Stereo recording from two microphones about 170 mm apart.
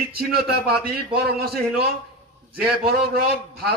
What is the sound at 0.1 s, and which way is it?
A man's voice, 65° right (ahead or behind).